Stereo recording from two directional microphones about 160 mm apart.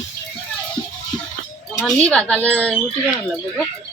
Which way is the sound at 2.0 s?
5° left (ahead or behind).